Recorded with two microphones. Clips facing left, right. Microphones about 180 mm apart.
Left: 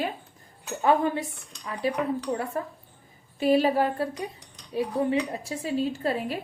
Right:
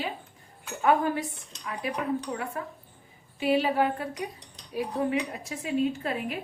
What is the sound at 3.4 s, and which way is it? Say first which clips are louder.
A woman's voice: left 3 dB; 40° left (ahead or behind).